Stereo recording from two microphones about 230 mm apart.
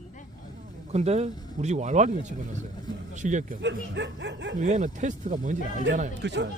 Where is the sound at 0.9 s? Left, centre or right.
Right.